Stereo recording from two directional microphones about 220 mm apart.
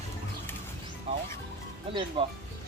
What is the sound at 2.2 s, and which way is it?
Speech, 25° right (ahead or behind).